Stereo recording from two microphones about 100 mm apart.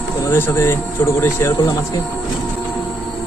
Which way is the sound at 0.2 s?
25° left (ahead or behind).